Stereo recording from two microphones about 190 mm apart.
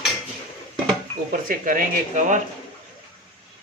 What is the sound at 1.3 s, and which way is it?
Speech, 45° right (ahead or behind).